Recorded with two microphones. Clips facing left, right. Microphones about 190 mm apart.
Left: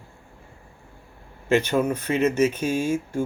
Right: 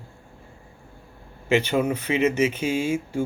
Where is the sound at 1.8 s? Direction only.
15° right (ahead or behind).